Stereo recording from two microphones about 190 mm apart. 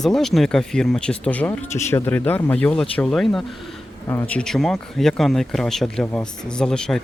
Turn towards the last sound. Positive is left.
turn(degrees=5)  # may be behind; listen again after turning